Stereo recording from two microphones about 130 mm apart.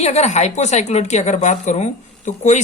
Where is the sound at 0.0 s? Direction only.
55° left (ahead or behind).